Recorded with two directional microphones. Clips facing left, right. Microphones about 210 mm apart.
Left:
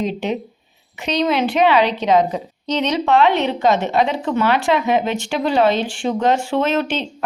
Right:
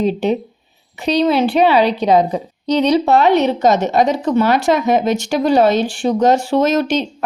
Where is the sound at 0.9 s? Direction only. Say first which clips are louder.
Right 4 dB; 35° right (ahead or behind).